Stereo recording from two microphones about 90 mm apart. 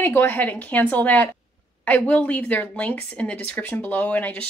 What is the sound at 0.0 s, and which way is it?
A woman's voice, 25° left (ahead or behind).